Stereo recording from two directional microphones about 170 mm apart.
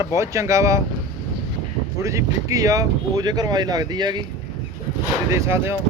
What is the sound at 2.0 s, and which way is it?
Speech, 20° right (ahead or behind).